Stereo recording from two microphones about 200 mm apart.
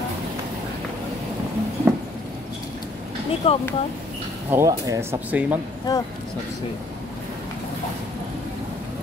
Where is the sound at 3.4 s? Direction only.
30° left (ahead or behind).